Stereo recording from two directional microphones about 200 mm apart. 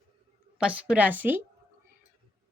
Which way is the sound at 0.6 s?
5° right (ahead or behind).